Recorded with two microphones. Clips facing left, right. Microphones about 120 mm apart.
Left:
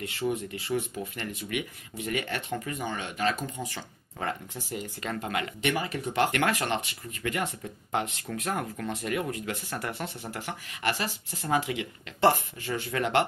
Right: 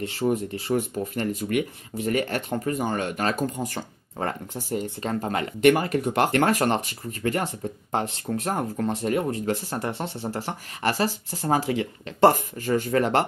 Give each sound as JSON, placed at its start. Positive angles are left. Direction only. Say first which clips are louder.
{"t": 0.0, "sound": "speech", "louder": "right 6 dB", "side_deg": -40}
{"t": 5.6, "sound": "speech", "louder": "right 14 dB", "side_deg": -50}